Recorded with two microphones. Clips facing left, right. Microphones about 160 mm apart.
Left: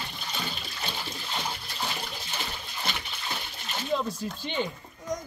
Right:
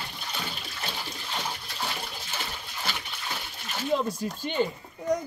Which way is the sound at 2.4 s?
15° left (ahead or behind).